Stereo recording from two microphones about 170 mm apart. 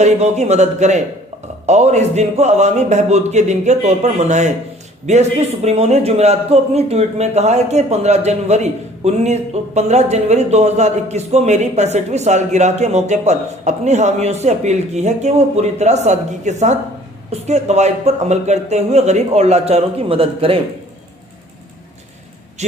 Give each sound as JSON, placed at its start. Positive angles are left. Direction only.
{"t": 0.0, "sound": "a man's voice", "side_deg": -40}